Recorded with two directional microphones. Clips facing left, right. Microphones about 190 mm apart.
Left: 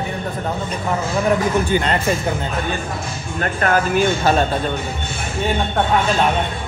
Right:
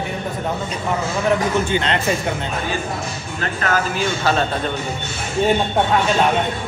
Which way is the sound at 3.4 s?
50° left (ahead or behind).